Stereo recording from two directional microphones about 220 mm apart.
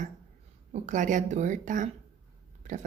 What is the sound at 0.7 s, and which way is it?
Speech, 35° right (ahead or behind).